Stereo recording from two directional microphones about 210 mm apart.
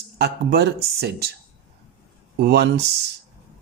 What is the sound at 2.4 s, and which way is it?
Speech, 50° right (ahead or behind).